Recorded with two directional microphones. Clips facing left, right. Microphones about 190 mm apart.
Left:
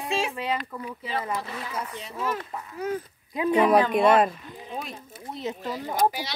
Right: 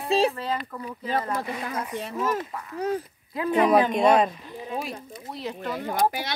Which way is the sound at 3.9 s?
5° left (ahead or behind).